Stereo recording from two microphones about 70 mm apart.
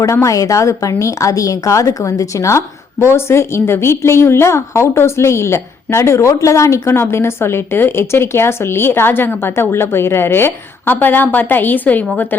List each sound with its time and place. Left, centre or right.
0.0 s a woman's voice: left